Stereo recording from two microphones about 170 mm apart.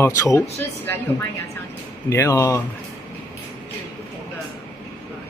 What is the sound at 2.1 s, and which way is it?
Speech, 15° left (ahead or behind).